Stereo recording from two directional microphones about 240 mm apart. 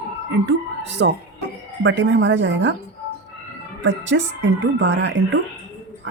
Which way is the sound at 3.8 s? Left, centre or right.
Right.